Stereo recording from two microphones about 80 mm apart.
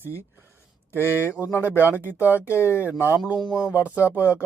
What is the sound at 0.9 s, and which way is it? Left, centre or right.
Speech, left.